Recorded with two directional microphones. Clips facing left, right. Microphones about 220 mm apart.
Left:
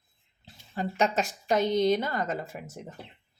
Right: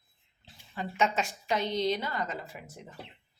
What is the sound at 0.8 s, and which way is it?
A woman's voice, 35° left (ahead or behind).